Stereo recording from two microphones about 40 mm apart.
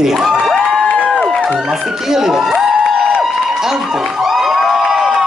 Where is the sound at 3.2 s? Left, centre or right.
Centre.